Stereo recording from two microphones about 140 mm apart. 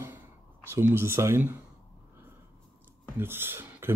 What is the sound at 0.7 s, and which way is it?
Speech, 15° right (ahead or behind).